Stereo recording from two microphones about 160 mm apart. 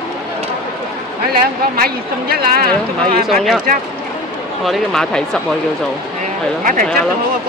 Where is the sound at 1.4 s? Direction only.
70° right (ahead or behind).